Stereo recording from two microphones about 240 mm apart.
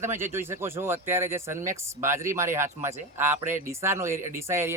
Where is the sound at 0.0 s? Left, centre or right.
Centre.